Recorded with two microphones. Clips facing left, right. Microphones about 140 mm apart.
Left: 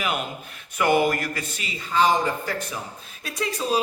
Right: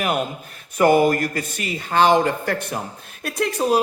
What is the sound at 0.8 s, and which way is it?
A man's voice, 40° right (ahead or behind).